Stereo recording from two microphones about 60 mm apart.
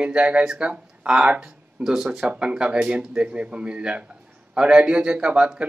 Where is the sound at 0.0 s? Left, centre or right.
Centre.